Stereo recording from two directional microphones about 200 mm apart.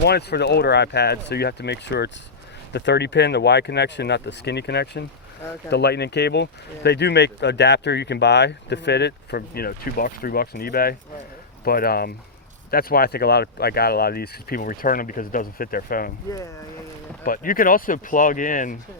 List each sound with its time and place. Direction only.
0.0 s speech: 55° left (ahead or behind)
17.2 s speech: 45° left (ahead or behind)